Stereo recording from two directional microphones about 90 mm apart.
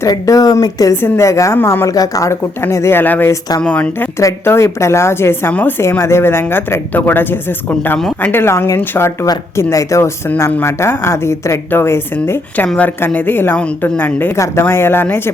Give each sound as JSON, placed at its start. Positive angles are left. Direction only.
{"t": 0.1, "sound": "a woman's voice", "side_deg": 45}
{"t": 1.9, "sound": "speech", "side_deg": 40}
{"t": 4.2, "sound": "a woman's voice", "side_deg": 30}
{"t": 14.3, "sound": "a woman's voice", "side_deg": 35}